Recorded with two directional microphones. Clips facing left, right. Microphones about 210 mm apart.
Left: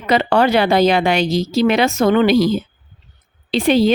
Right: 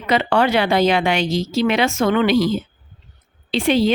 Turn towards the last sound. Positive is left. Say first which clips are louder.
# left 3 dB
turn(degrees=40)  # may be behind; listen again after turning